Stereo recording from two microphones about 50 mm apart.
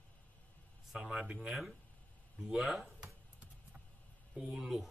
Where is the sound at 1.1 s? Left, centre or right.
Centre.